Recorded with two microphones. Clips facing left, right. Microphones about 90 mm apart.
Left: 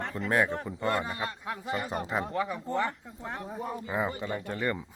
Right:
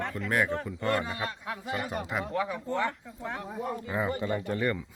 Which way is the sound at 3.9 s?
15° left (ahead or behind).